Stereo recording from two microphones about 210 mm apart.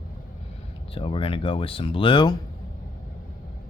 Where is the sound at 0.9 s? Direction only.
25° left (ahead or behind).